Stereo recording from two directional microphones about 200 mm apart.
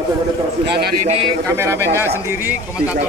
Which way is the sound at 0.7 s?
50° right (ahead or behind).